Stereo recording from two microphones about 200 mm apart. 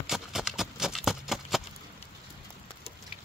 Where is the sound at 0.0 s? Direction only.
Centre (ahead or behind).